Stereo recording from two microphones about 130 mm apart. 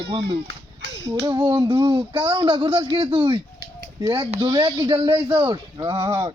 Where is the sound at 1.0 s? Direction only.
30° right (ahead or behind).